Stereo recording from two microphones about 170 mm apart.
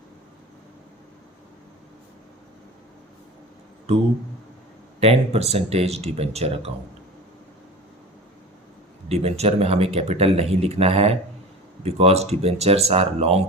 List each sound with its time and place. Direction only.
4.9 s speech: 40° right (ahead or behind)
9.0 s speech: 40° right (ahead or behind)